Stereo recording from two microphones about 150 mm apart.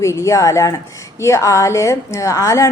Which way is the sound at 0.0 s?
20° left (ahead or behind).